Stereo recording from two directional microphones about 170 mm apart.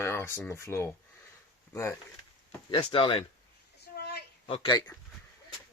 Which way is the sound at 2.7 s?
30° left (ahead or behind).